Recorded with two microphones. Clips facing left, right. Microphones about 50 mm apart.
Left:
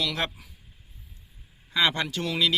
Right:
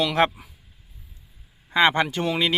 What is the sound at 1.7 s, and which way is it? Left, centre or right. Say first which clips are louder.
Speech: right 6 dB; right.